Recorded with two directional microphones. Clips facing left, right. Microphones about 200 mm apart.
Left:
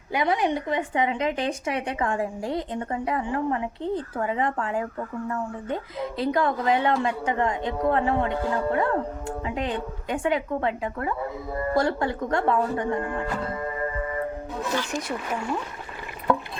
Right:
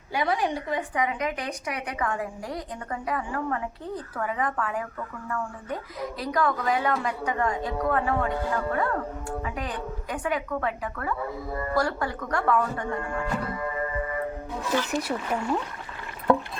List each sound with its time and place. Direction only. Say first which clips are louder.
0.1 s speech: left 3 dB; 20° left (ahead or behind)
14.8 s speech: right 2 dB; 5° right (ahead or behind)